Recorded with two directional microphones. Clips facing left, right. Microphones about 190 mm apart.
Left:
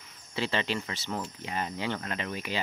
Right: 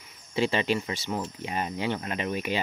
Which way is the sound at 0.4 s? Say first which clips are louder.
Right 5 dB; 15° right (ahead or behind).